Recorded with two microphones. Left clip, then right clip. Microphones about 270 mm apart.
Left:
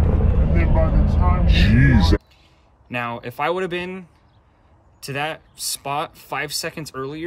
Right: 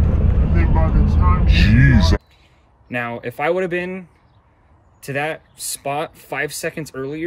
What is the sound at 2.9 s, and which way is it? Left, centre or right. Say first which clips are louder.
Speech: right 2 dB; centre.